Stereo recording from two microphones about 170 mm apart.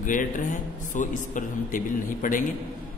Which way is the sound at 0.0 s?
50° left (ahead or behind).